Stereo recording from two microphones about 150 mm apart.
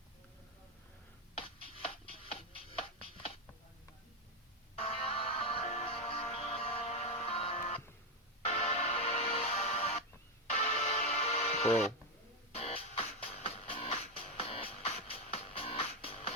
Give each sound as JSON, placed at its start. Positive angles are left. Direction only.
{"t": 2.2, "sound": "music", "side_deg": 40}
{"t": 4.8, "sound": "music", "side_deg": 40}